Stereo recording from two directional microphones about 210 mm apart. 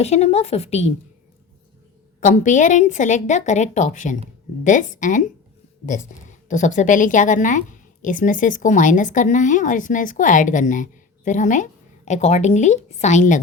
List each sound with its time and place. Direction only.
0.0 s a woman's voice: 30° left (ahead or behind)
2.2 s a woman's voice: 35° left (ahead or behind)
6.5 s a woman's voice: 35° left (ahead or behind)